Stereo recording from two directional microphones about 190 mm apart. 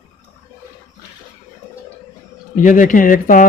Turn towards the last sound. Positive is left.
turn(degrees=45)  # may be behind; listen again after turning